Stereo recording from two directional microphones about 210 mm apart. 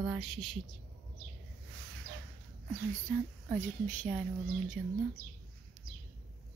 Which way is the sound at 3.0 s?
5° left (ahead or behind).